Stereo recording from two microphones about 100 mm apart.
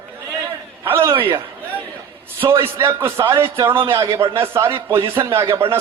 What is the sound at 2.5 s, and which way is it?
A man's voice, 30° right (ahead or behind).